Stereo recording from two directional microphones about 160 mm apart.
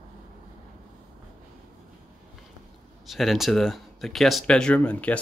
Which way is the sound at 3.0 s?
Centre (ahead or behind).